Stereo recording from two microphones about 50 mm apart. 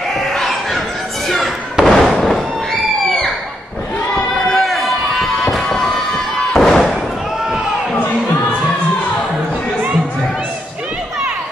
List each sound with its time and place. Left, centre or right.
0.1 s crowd: centre
1.3 s fireworks: centre
2.0 s fireworks: left
2.2 s a sound: centre
4.5 s fireworks: centre